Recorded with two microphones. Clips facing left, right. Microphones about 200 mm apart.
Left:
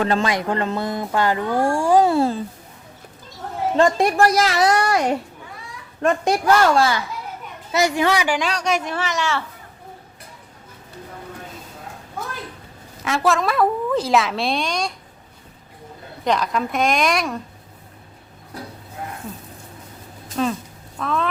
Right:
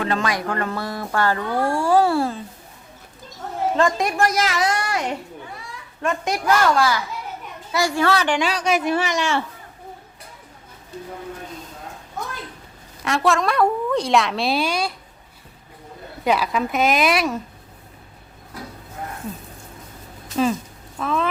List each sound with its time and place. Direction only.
0.0 s speech: 30° left (ahead or behind)
3.8 s a woman's voice: 30° left (ahead or behind); by 8.4 s 15° left (ahead or behind)
8.4 s speech: centre (ahead or behind)
13.1 s a woman's voice: centre (ahead or behind)
16.2 s a woman's voice: 5° right (ahead or behind)
20.3 s a woman's voice: 5° right (ahead or behind)